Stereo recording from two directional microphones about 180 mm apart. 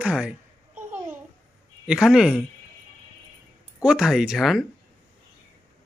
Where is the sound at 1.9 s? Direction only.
5° right (ahead or behind).